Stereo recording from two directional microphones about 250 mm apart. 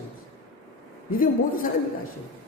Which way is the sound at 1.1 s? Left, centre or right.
Left.